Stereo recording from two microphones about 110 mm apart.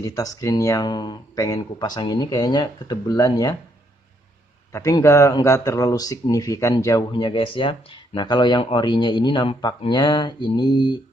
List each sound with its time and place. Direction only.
0.0 s speech: 30° left (ahead or behind)
4.7 s speech: 30° left (ahead or behind)